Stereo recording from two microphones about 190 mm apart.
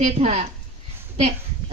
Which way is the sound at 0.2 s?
35° right (ahead or behind).